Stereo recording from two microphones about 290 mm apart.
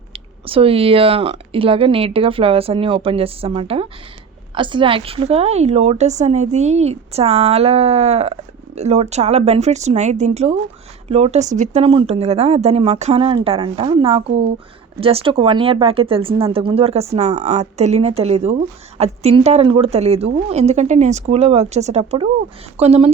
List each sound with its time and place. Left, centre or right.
0.1 s a woman's voice: centre